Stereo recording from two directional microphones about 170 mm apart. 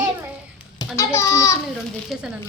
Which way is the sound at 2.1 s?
Centre (ahead or behind).